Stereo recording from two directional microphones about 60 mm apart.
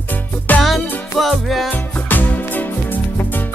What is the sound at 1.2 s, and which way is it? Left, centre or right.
Music, centre.